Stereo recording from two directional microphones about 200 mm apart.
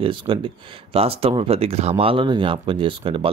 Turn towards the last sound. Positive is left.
turn(degrees=-25)  # may be behind; listen again after turning